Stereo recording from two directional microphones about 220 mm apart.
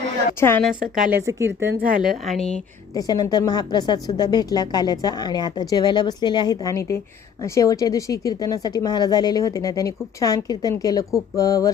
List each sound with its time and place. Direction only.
0.3 s a woman's voice: 10° left (ahead or behind)
0.7 s a woman's voice: 5° right (ahead or behind)
2.0 s a woman's voice: centre (ahead or behind)
2.9 s a woman's voice: 15° left (ahead or behind)